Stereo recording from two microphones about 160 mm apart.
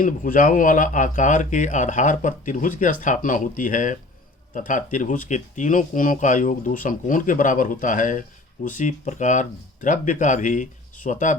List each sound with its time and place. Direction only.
0.0 s speech: 55° left (ahead or behind)